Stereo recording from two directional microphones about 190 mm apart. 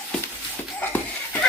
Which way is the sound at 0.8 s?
10° left (ahead or behind).